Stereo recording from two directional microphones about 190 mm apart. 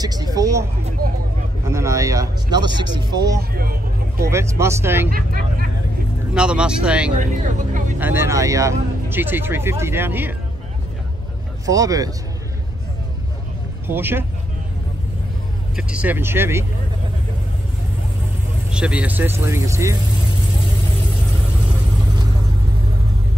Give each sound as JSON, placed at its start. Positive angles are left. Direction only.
{"t": 0.0, "sound": "speech", "side_deg": -20}
{"t": 1.7, "sound": "speech", "side_deg": -15}
{"t": 3.3, "sound": "speech", "side_deg": -50}
{"t": 4.3, "sound": "speech", "side_deg": -15}
{"t": 5.1, "sound": "speech", "side_deg": -50}
{"t": 6.3, "sound": "speech", "side_deg": -5}
{"t": 7.2, "sound": "speech", "side_deg": -40}
{"t": 8.0, "sound": "speech", "side_deg": -10}
{"t": 11.6, "sound": "speech", "side_deg": -15}
{"t": 13.8, "sound": "speech", "side_deg": -10}
{"t": 15.7, "sound": "speech", "side_deg": -5}
{"t": 18.7, "sound": "speech", "side_deg": -5}